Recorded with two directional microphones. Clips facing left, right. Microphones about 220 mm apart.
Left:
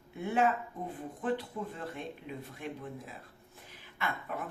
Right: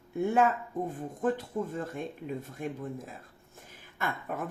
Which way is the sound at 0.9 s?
45° right (ahead or behind).